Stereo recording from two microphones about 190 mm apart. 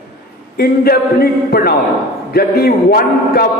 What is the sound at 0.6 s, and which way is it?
A man's voice, 55° left (ahead or behind).